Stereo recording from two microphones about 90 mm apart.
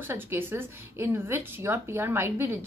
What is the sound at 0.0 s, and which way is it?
A woman's voice, 25° right (ahead or behind).